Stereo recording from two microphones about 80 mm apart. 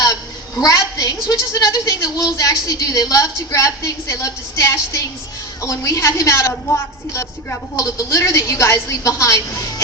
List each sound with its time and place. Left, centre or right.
0.6 s a woman's voice: left